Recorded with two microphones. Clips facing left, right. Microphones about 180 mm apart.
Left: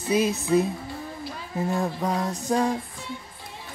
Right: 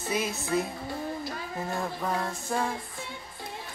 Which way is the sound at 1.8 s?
20° left (ahead or behind).